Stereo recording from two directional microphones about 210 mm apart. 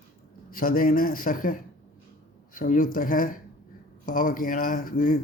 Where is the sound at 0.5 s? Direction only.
40° left (ahead or behind).